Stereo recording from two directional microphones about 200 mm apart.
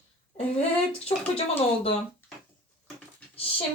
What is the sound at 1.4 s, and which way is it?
Speech, 30° left (ahead or behind).